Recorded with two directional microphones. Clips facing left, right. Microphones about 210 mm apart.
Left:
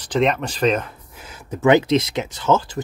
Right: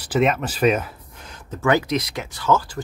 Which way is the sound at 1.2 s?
5° left (ahead or behind).